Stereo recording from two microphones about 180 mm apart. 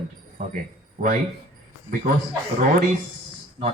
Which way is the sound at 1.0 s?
40° right (ahead or behind).